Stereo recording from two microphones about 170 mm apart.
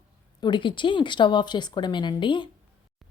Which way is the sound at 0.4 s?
30° left (ahead or behind).